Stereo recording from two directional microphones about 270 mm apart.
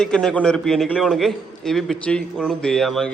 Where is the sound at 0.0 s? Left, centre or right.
Centre.